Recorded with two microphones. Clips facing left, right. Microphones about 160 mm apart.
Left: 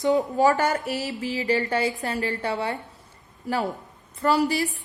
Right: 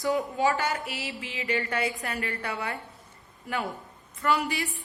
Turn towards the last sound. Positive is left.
turn(degrees=35)  # may be behind; listen again after turning